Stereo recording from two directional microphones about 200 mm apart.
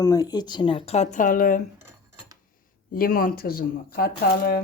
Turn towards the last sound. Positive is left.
turn(degrees=50)  # may be behind; listen again after turning